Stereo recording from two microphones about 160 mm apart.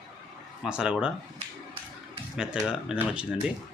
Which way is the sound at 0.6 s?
5° right (ahead or behind).